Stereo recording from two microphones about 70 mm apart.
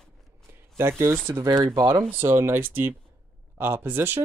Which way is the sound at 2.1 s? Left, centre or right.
Right.